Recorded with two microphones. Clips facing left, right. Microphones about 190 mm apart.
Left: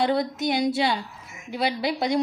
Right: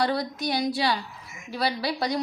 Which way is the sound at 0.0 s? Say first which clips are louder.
Left 3 dB; 20° left (ahead or behind).